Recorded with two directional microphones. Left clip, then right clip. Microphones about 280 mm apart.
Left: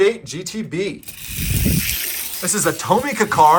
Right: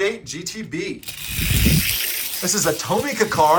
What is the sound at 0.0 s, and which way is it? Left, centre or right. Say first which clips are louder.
Speech: left 6 dB; centre.